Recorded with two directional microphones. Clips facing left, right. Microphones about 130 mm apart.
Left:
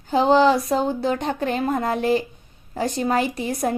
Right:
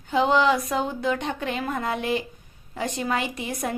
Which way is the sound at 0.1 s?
35° left (ahead or behind).